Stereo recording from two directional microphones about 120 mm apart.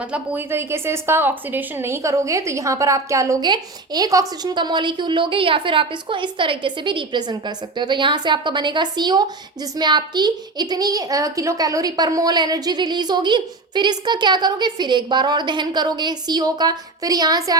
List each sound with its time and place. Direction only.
0.1 s a woman's voice: 15° right (ahead or behind); by 17.6 s 30° right (ahead or behind)